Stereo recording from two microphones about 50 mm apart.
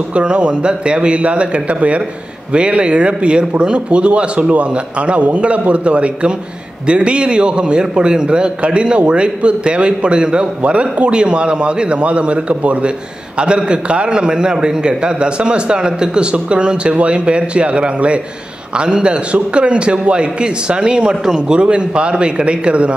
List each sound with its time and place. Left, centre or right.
0.1 s a man's voice: right